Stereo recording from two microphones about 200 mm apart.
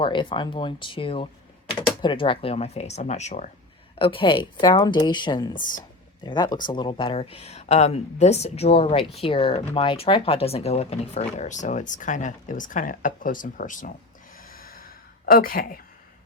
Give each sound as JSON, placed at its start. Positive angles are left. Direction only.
{"t": 0.0, "sound": "speech", "side_deg": 25}
{"t": 14.3, "sound": "gasp", "side_deg": 45}
{"t": 15.3, "sound": "a woman's voice", "side_deg": 45}